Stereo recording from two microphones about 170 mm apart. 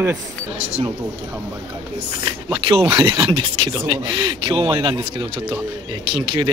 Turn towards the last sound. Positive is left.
turn(degrees=-30)  # may be behind; listen again after turning